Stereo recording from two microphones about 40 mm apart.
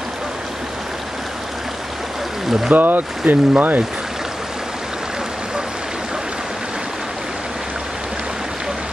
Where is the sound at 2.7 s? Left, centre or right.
Right.